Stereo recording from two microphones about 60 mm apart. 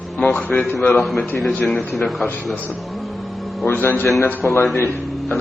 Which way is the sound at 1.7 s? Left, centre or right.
Centre.